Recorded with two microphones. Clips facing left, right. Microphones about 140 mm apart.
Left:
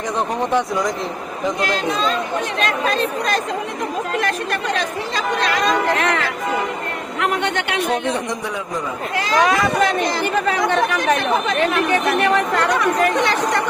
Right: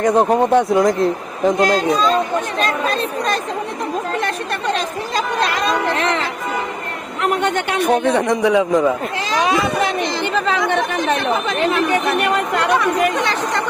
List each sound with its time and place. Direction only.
0.0 s speech: 55° right (ahead or behind)
1.5 s speech: 40° right (ahead or behind)
6.0 s speech: 25° right (ahead or behind)
7.2 s speech: 40° right (ahead or behind)
8.1 s speech: 65° right (ahead or behind)
9.4 s speech: 20° right (ahead or behind)